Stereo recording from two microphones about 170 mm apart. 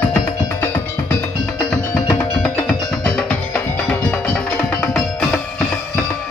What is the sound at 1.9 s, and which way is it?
Music, 5° left (ahead or behind).